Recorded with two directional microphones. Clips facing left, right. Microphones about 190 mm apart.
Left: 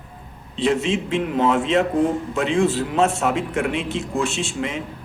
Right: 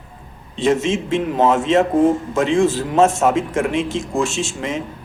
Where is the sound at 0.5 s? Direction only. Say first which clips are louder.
Right 3 dB; 45° right (ahead or behind).